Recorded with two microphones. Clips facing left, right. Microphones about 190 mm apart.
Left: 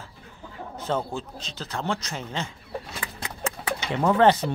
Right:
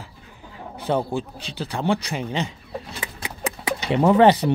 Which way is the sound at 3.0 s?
15° right (ahead or behind).